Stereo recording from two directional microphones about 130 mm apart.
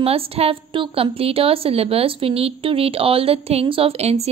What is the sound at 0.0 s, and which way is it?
A woman's voice, 50° right (ahead or behind).